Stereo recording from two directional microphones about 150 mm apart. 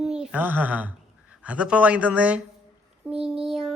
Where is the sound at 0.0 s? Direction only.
5° right (ahead or behind).